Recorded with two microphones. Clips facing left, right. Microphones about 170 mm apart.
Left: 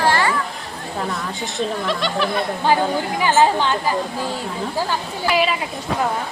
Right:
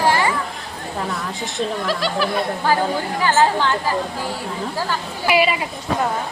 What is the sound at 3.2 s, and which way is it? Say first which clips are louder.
Speech: left 1 dB; 15° left (ahead or behind).